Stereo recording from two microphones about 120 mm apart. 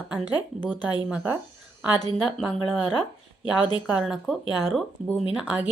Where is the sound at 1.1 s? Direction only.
15° right (ahead or behind).